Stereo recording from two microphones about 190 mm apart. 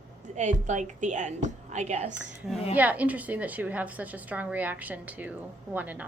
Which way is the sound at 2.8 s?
10° right (ahead or behind).